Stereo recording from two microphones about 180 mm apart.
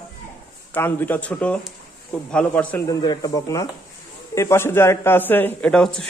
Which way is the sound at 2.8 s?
20° left (ahead or behind).